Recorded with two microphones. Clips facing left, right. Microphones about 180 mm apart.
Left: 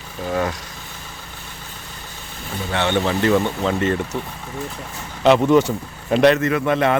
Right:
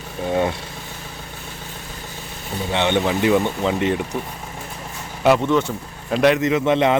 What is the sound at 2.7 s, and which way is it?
Speech, 15° right (ahead or behind).